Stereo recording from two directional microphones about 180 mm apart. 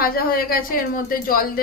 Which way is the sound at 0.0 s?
55° left (ahead or behind).